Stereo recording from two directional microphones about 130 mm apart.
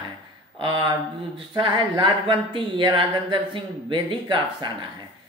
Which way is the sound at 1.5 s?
35° right (ahead or behind).